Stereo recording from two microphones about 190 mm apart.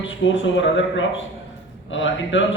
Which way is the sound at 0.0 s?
80° left.